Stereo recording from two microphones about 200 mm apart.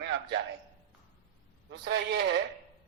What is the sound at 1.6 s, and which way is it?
Speech, 60° right (ahead or behind).